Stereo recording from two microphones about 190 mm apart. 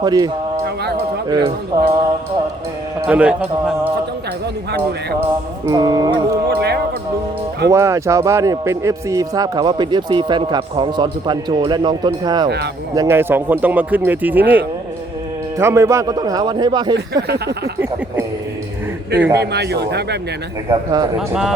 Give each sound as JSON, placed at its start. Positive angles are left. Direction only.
{"t": 0.0, "sound": "a man's voice", "side_deg": -20}
{"t": 3.1, "sound": "speech", "side_deg": -5}
{"t": 5.6, "sound": "a man's voice", "side_deg": -20}
{"t": 6.5, "sound": "a man's voice", "side_deg": -60}
{"t": 7.7, "sound": "a man's voice", "side_deg": -15}
{"t": 17.2, "sound": "a man's voice", "side_deg": -60}
{"t": 19.4, "sound": "a man's voice", "side_deg": -60}
{"t": 20.7, "sound": "a man's voice", "side_deg": -20}
{"t": 21.2, "sound": "speech", "side_deg": 0}